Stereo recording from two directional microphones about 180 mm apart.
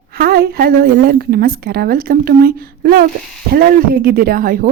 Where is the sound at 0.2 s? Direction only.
60° right (ahead or behind).